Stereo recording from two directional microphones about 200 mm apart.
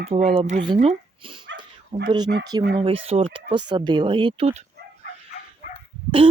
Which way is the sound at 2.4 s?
20° right (ahead or behind).